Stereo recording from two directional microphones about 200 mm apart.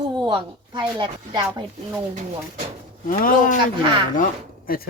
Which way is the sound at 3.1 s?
45° left (ahead or behind).